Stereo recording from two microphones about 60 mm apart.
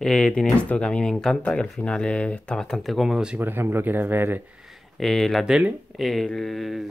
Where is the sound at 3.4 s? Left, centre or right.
Right.